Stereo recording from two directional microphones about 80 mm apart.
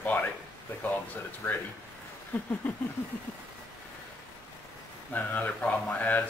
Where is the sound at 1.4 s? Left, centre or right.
Left.